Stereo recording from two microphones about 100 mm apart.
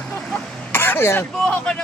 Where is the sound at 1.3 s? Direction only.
10° left (ahead or behind).